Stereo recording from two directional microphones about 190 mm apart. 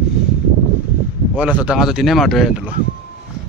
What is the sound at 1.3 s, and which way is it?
Speech, 5° right (ahead or behind).